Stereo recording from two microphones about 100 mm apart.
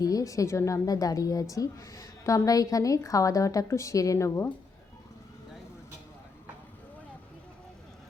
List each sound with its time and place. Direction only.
0.0 s a woman's voice: 35° left (ahead or behind)